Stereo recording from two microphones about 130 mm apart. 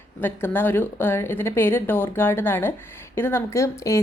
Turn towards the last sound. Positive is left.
turn(degrees=20)  # may be behind; listen again after turning